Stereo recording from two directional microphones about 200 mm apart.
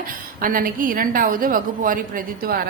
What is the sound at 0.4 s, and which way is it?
A woman's voice, 45° right (ahead or behind).